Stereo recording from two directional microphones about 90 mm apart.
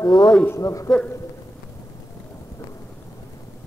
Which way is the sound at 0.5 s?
35° left (ahead or behind).